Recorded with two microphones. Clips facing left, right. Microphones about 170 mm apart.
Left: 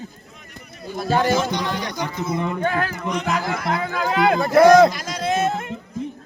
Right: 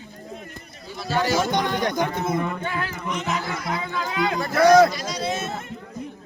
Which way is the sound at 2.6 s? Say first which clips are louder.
Left 6 dB; 50° left (ahead or behind).